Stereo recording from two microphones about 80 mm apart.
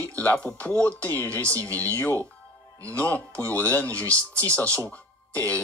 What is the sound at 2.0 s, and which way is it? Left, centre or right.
Speech, left.